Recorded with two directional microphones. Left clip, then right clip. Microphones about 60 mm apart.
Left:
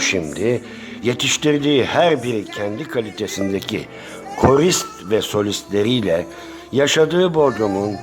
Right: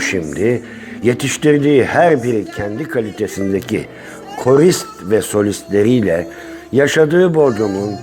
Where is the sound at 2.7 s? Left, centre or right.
Centre.